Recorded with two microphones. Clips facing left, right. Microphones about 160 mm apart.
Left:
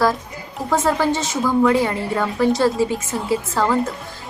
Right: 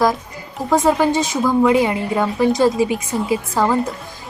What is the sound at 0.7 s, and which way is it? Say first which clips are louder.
A woman's voice: right 3 dB; 15° right (ahead or behind).